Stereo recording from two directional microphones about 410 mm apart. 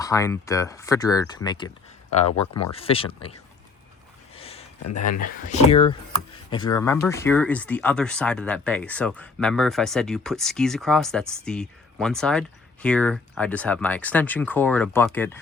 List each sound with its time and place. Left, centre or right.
0.0 s speech: centre
2.3 s speech: left
2.6 s speech: centre
4.4 s a sound: centre
5.2 s speech: centre